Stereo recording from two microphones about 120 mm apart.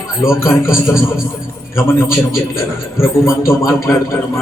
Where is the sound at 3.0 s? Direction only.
25° left (ahead or behind).